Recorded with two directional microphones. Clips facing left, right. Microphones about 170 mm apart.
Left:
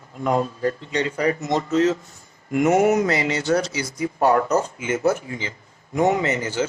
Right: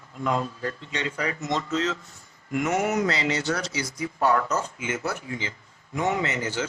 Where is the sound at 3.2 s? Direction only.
50° left (ahead or behind).